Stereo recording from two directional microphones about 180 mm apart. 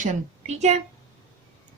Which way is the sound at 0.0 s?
40° right (ahead or behind).